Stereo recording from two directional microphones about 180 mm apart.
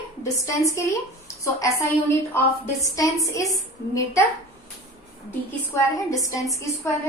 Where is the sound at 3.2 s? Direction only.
20° left (ahead or behind).